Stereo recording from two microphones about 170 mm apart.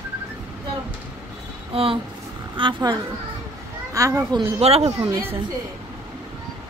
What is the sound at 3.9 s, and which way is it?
Speech, 20° right (ahead or behind).